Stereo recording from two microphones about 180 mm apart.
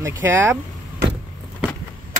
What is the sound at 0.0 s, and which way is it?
Speech, 15° right (ahead or behind).